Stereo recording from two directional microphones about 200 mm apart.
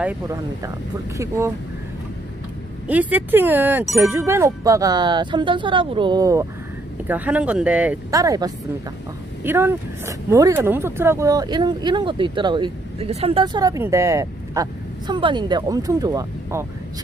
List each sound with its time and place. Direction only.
1.1 s speech: 15° right (ahead or behind)
2.9 s speech: 10° right (ahead or behind)
7.1 s speech: 5° right (ahead or behind)